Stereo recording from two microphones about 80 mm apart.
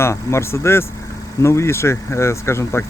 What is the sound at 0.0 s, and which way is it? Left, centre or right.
Speech, left.